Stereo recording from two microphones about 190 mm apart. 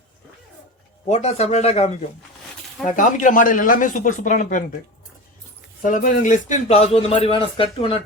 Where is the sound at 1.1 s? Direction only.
35° left (ahead or behind).